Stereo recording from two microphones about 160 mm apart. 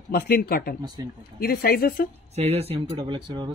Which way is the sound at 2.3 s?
40° right (ahead or behind).